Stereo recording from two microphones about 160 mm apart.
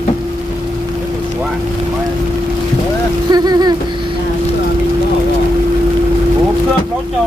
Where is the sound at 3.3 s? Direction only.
25° right (ahead or behind).